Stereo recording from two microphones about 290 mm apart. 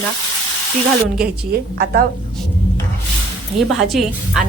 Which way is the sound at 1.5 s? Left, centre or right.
Right.